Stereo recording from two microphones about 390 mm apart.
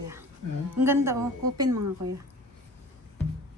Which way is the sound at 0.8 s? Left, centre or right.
Centre.